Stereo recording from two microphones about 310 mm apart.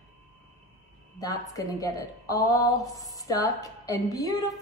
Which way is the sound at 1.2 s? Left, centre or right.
Centre.